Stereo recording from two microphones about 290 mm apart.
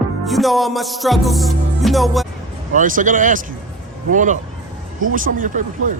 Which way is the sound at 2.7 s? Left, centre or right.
Right.